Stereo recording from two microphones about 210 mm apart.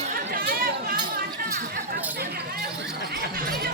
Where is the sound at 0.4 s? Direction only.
45° right (ahead or behind).